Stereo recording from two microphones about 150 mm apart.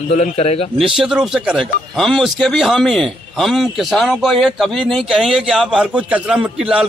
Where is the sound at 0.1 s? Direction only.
45° left (ahead or behind).